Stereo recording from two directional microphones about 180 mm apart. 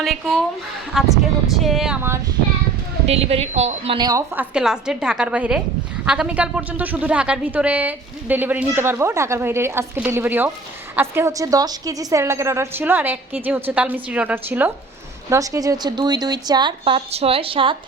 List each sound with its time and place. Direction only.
0.0 s a woman's voice: centre (ahead or behind)
2.0 s speech: 15° right (ahead or behind)
3.1 s speech: 35° right (ahead or behind)
3.9 s speech: 20° right (ahead or behind)
4.4 s a woman's voice: 5° right (ahead or behind); by 17.7 s 30° right (ahead or behind)